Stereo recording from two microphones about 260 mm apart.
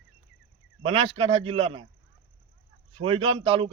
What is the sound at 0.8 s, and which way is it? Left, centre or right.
Speech, right.